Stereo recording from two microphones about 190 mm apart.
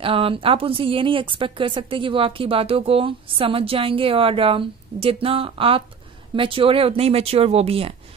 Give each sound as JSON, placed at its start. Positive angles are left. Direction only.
{"t": 0.0, "sound": "a woman's voice", "side_deg": -30}